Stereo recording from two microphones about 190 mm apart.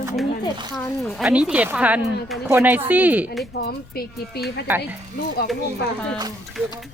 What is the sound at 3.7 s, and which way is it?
Speech, 55° left (ahead or behind).